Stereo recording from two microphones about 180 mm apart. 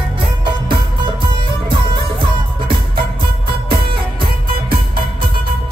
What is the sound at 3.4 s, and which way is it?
Music, 55° right (ahead or behind).